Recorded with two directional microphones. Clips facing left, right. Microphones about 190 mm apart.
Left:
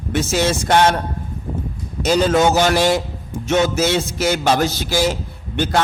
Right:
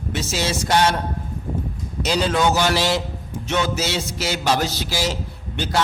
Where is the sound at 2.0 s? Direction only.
50° left (ahead or behind).